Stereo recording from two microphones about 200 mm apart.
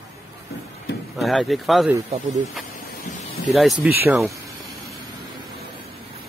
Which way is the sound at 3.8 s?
5° right (ahead or behind).